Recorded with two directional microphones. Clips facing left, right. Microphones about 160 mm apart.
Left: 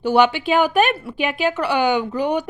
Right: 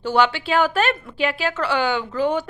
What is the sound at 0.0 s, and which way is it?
A woman's voice, 15° left (ahead or behind).